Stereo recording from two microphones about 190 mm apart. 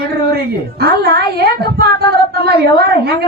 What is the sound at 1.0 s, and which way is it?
A woman's voice, 55° right (ahead or behind).